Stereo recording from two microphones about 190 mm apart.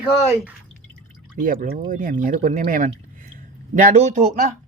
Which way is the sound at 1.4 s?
45° right (ahead or behind).